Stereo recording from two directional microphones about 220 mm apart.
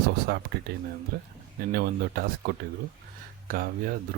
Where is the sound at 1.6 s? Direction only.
45° right (ahead or behind).